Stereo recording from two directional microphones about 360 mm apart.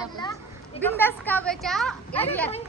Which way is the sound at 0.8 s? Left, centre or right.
Centre.